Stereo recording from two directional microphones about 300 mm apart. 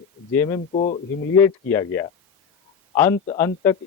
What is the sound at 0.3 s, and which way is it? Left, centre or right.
Speech, centre.